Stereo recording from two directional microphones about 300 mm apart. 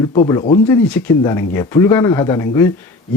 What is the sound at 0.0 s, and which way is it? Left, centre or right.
Speech, centre.